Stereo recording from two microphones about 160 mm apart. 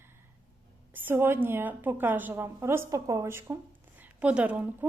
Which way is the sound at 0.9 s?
15° right (ahead or behind).